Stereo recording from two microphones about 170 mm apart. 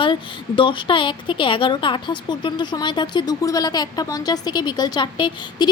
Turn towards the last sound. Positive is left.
turn(degrees=25)  # may be behind; listen again after turning